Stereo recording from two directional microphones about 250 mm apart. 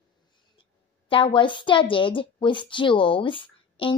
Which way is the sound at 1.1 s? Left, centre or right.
Left.